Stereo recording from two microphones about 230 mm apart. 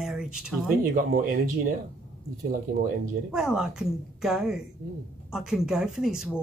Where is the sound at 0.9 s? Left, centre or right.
Right.